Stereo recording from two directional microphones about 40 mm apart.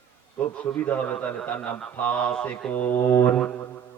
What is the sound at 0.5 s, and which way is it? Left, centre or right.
A man's voice, left.